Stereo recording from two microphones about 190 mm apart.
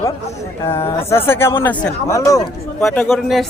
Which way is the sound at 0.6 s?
15° left (ahead or behind).